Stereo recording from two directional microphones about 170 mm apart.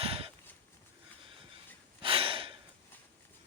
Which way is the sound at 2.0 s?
30° right (ahead or behind).